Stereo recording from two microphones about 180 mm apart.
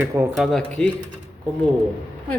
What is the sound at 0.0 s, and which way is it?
Speech, 15° right (ahead or behind).